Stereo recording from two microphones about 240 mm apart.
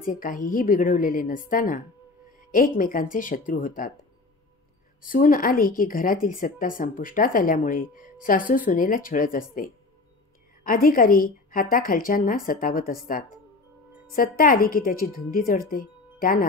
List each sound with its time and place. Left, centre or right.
0.0 s speech: left
5.0 s speech: left
14.1 s speech: left